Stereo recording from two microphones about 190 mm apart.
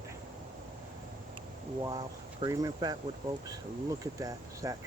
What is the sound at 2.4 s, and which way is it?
Speech, 20° right (ahead or behind).